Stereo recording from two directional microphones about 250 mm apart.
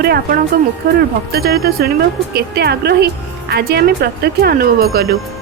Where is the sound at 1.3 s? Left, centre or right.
Right.